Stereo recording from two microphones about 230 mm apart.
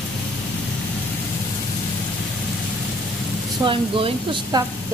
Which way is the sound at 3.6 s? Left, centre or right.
Right.